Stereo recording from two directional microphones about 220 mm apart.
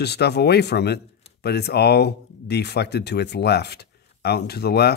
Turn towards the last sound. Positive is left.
turn(degrees=45)  # may be behind; listen again after turning